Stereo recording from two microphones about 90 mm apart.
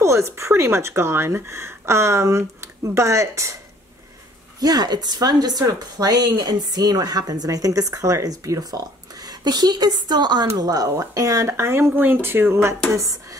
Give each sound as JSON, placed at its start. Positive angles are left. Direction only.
{"t": 0.0, "sound": "speech", "side_deg": -30}
{"t": 4.6, "sound": "a woman's voice", "side_deg": -45}